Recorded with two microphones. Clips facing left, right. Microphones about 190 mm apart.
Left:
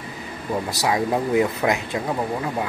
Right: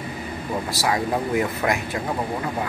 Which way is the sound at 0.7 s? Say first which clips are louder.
Left 1 dB; 20° left (ahead or behind).